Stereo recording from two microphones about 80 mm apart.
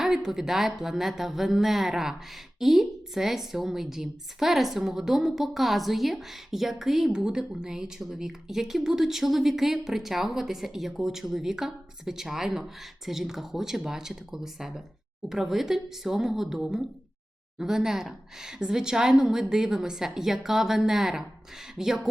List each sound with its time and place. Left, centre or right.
0.0 s a woman's voice: centre